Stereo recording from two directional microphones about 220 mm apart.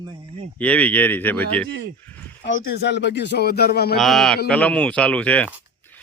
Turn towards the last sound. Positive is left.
turn(degrees=5)  # may be behind; listen again after turning